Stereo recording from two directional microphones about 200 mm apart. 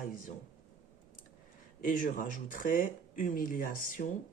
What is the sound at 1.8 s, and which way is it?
Speech, 40° left (ahead or behind).